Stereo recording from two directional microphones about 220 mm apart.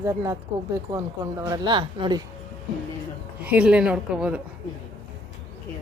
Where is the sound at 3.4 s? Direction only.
5° right (ahead or behind).